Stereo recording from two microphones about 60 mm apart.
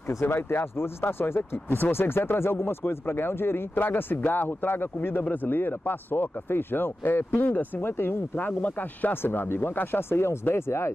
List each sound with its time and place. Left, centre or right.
0.3 s speech: left
7.8 s speech: left